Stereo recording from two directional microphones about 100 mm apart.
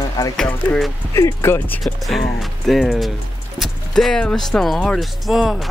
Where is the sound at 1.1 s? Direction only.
25° left (ahead or behind).